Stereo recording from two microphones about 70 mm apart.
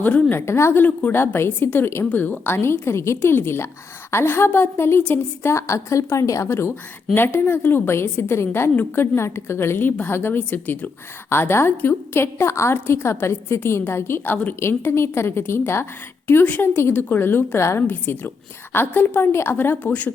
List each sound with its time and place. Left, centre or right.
0.0 s a woman's voice: centre
0.3 s a woman's voice: left